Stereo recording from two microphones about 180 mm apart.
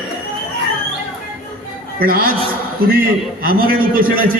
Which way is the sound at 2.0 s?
55° right (ahead or behind).